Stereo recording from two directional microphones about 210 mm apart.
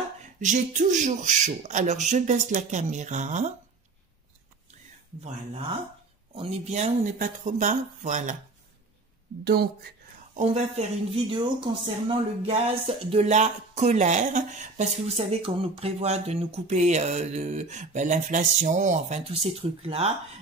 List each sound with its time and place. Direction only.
0.4 s speech: 35° right (ahead or behind)
6.3 s speech: 30° right (ahead or behind)
9.4 s speech: 50° right (ahead or behind)
10.3 s speech: 30° right (ahead or behind)